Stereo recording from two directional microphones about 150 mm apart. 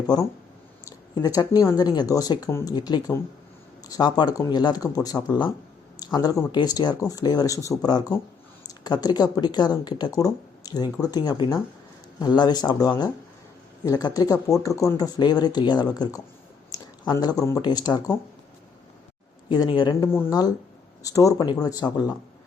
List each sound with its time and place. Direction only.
0.9 s a sound: 25° left (ahead or behind)
1.6 s speech: 25° left (ahead or behind)
19.5 s speech: 30° left (ahead or behind)
20.1 s a woman's voice: 15° left (ahead or behind)